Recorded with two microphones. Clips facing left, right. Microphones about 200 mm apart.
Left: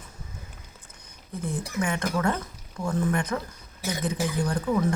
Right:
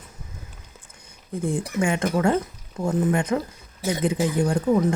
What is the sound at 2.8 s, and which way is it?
Speech, 25° right (ahead or behind).